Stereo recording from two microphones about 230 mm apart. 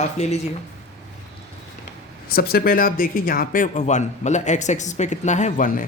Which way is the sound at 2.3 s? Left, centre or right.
Left.